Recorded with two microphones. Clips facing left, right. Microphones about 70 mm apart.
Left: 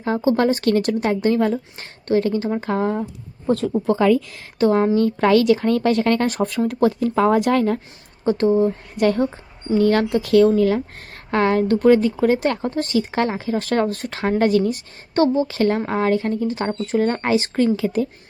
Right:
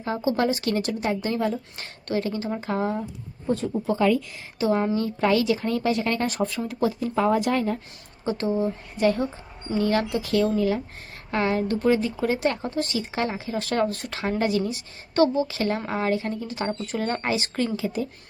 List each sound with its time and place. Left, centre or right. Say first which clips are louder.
0.0 s speech: left 6 dB; left
1.8 s a woman's voice: left 8 dB; left
4.6 s speech: left 6 dB; left
5.0 s speech: left 6 dB; left
8.2 s speech: left 8 dB; left
9.0 s speech: left 4 dB; left
11.3 s speech: left 6 dB; left
15.1 s speech: left 3 dB; left
17.7 s speech: left 7 dB; left